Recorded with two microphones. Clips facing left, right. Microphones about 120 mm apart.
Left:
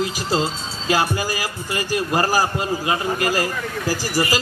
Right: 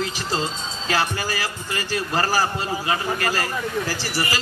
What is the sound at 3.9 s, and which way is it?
Speech, 45° left (ahead or behind).